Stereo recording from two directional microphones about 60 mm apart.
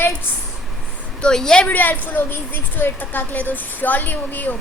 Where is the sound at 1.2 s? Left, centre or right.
Centre.